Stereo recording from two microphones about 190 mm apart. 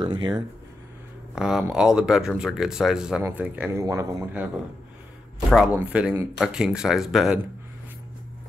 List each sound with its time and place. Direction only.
0.0 s speech: 25° right (ahead or behind)
1.3 s speech: 5° right (ahead or behind)
5.5 s speech: 5° right (ahead or behind)